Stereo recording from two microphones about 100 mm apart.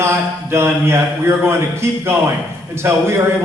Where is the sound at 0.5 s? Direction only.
25° right (ahead or behind).